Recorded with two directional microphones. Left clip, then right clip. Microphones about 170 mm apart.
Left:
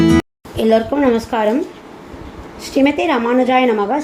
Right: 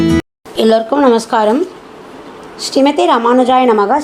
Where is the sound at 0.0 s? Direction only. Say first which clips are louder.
Even; centre (ahead or behind).